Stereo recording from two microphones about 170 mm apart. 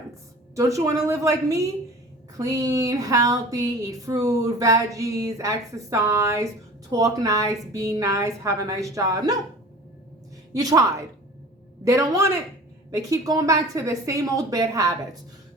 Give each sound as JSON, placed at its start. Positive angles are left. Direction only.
{"t": 0.5, "sound": "speech", "side_deg": -20}
{"t": 10.5, "sound": "a man's voice", "side_deg": -20}